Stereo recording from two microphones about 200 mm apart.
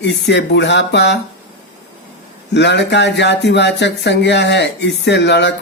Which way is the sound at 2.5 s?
60° left (ahead or behind).